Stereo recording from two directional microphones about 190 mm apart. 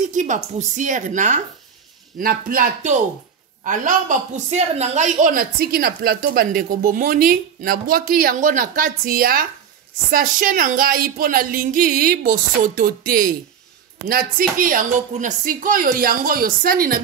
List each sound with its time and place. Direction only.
0.1 s a woman's voice: 40° right (ahead or behind)
14.6 s a woman's voice: 45° right (ahead or behind)